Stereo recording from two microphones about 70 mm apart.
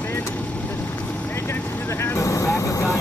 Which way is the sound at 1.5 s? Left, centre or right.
Left.